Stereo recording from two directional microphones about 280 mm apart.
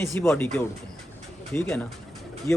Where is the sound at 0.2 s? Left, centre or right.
Centre.